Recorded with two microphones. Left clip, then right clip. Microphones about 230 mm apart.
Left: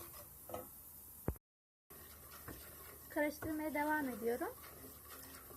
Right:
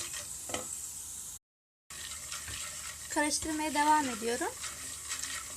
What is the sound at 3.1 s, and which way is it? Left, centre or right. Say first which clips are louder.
Speech: right 7 dB; centre.